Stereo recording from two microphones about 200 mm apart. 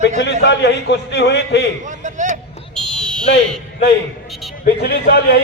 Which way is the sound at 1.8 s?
40° right (ahead or behind).